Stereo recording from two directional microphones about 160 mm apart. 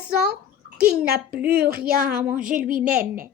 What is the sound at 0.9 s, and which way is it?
A woman's voice, 75° right (ahead or behind).